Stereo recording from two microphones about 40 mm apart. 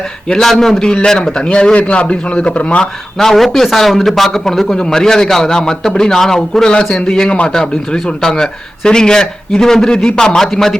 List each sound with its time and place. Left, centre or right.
0.8 s a man's voice: left
3.2 s a man's voice: centre